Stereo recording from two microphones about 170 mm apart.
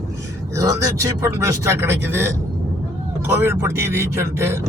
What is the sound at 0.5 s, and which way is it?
Speech, 20° right (ahead or behind).